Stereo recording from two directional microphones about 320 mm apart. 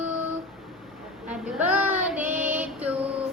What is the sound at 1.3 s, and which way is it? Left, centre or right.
Child singing, centre.